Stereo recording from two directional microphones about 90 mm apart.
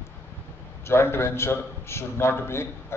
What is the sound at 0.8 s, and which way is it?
A man's voice, 30° left (ahead or behind).